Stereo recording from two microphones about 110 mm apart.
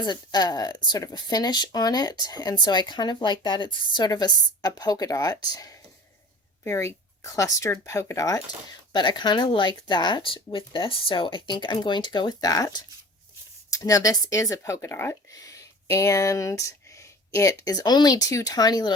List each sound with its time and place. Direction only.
0.0 s speech: 40° left (ahead or behind)
8.9 s speech: 45° left (ahead or behind)